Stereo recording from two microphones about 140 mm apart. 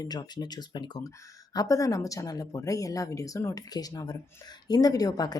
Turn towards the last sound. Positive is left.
turn(degrees=25)  # may be behind; listen again after turning